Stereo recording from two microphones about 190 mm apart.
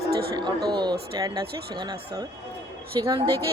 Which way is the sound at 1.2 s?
20° right (ahead or behind).